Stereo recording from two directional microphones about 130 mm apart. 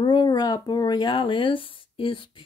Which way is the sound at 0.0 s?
40° left (ahead or behind).